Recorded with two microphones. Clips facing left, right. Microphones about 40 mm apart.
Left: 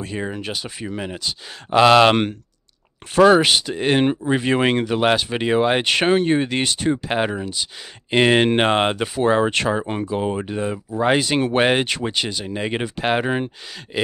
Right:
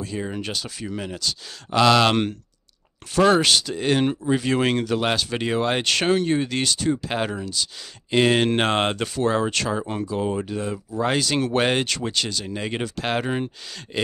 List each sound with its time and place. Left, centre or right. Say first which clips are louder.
0.0 s speech: left 2 dB; left
0.3 s speech: left 1 dB; centre
0.6 s speech: left 2 dB; left